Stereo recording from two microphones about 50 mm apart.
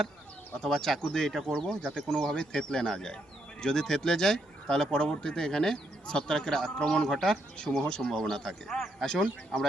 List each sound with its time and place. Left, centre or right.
0.6 s speech: centre